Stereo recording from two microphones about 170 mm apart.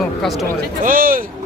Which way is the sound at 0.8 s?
55° right (ahead or behind).